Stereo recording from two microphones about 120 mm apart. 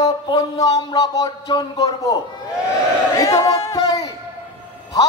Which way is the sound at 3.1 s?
30° left (ahead or behind).